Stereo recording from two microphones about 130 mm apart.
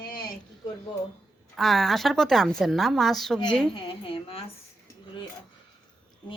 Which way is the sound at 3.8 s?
45° left (ahead or behind).